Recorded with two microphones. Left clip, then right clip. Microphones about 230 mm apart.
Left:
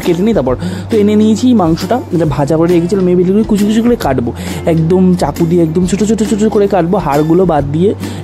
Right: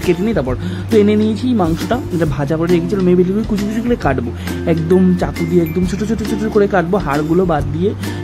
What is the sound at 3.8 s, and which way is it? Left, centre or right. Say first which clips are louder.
Speech: left 2 dB; centre.